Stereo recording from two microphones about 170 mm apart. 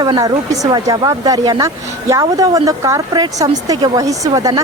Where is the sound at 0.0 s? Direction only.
25° right (ahead or behind).